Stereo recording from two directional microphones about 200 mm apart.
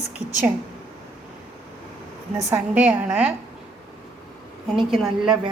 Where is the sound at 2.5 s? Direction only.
10° right (ahead or behind).